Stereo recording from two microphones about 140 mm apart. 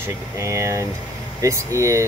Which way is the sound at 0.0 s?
20° right (ahead or behind).